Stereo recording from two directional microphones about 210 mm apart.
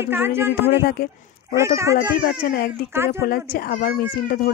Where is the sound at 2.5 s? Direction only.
45° left (ahead or behind).